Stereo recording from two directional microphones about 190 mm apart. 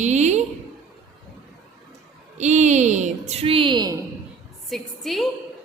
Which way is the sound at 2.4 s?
40° right (ahead or behind).